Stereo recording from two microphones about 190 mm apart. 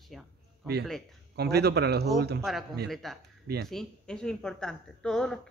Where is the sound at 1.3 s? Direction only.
60° right (ahead or behind).